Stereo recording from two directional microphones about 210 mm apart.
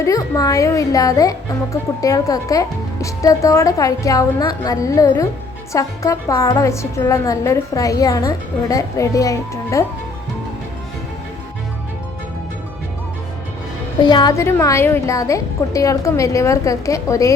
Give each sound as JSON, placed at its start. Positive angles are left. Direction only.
{"t": 0.0, "sound": "speech", "side_deg": 15}
{"t": 14.0, "sound": "speech", "side_deg": 20}